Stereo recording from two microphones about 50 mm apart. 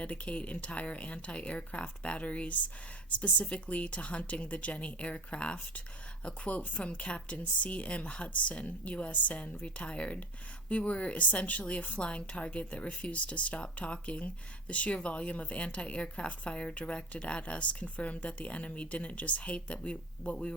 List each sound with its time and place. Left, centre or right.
0.0 s a woman's voice: left